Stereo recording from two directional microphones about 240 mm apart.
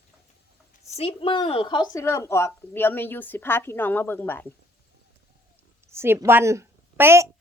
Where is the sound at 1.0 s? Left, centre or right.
Left.